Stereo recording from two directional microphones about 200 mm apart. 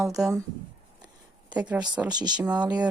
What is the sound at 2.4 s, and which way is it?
Speech, 5° right (ahead or behind).